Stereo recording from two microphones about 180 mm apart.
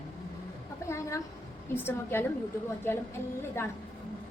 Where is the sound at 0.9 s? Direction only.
15° left (ahead or behind).